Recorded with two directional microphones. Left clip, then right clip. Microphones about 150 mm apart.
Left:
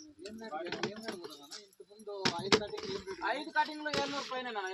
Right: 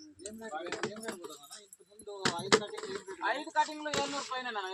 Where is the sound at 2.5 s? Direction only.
25° left (ahead or behind).